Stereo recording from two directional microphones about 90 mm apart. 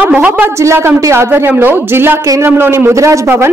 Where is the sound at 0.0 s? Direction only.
15° right (ahead or behind).